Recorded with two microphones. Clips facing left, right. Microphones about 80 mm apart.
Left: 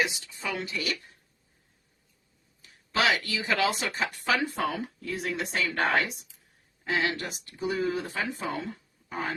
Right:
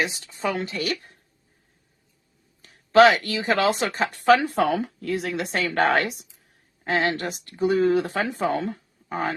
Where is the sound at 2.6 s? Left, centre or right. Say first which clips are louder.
Right 12 dB; right.